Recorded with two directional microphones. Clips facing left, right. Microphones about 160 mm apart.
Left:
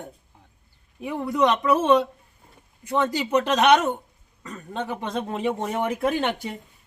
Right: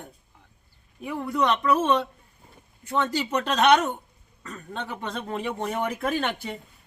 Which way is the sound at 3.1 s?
15° left (ahead or behind).